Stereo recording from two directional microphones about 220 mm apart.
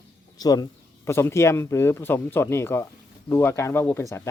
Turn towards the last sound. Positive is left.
turn(degrees=10)  # may be behind; listen again after turning